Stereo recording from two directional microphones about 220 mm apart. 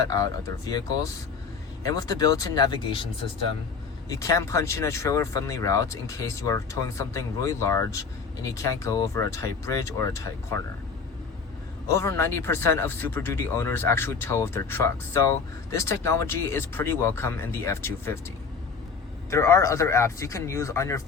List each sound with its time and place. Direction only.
0.1 s speech: 15° left (ahead or behind)
4.2 s speech: 15° left (ahead or behind)
11.9 s speech: 15° left (ahead or behind)
19.3 s speech: 15° left (ahead or behind)